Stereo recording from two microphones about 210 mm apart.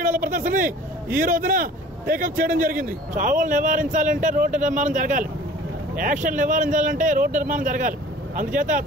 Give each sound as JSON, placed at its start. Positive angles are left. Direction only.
{"t": 0.0, "sound": "vehicle", "side_deg": -40}
{"t": 1.1, "sound": "a man's voice", "side_deg": -40}
{"t": 6.2, "sound": "a man's voice", "side_deg": -40}